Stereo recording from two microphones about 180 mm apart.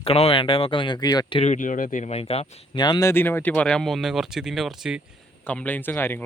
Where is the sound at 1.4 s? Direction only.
40° left (ahead or behind).